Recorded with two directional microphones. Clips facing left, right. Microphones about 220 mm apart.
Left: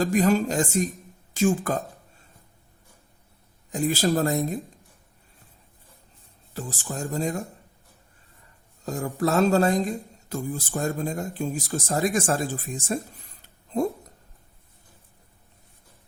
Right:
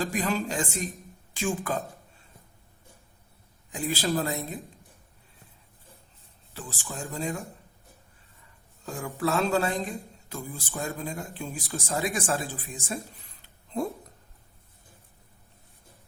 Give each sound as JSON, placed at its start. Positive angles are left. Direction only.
{"t": 0.0, "sound": "a woman's voice", "side_deg": 45}
{"t": 3.7, "sound": "speech", "side_deg": 45}
{"t": 6.5, "sound": "speech", "side_deg": 40}
{"t": 8.8, "sound": "speech", "side_deg": 40}
{"t": 13.7, "sound": "speech", "side_deg": 40}